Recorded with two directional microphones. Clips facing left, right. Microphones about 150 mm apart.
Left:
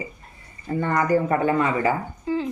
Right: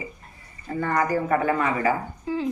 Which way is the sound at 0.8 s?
25° left (ahead or behind).